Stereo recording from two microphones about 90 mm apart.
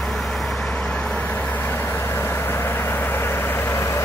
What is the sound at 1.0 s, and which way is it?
Vehicle, 15° left (ahead or behind).